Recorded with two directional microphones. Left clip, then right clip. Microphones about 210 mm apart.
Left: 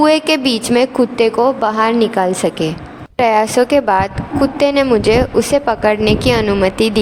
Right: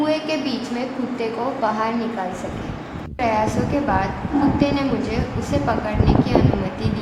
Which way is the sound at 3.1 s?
55° left (ahead or behind).